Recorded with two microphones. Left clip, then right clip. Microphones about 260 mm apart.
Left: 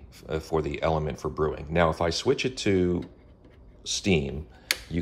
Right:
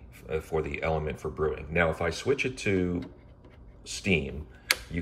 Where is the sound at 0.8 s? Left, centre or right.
Left.